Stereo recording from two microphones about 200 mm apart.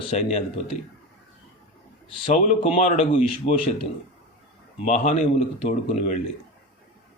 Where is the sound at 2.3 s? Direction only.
35° left (ahead or behind).